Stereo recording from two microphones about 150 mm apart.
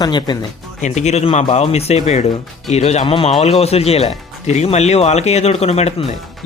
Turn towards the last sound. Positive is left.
turn(degrees=45)  # may be behind; listen again after turning